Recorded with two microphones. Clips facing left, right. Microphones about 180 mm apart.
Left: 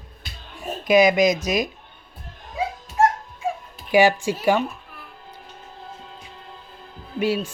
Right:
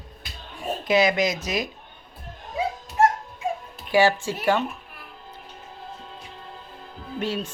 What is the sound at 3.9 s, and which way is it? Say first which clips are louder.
Speech: left 3 dB; 15° left (ahead or behind).